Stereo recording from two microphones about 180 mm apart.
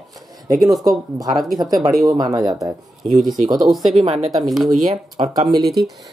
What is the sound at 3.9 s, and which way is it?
Speech, 35° right (ahead or behind).